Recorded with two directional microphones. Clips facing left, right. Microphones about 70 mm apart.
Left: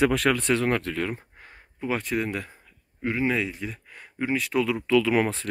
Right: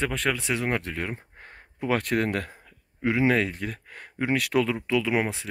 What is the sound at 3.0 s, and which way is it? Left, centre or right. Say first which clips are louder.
Speech: right 3 dB; right.